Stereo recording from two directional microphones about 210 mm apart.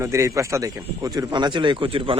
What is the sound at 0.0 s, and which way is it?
Speech, 15° right (ahead or behind).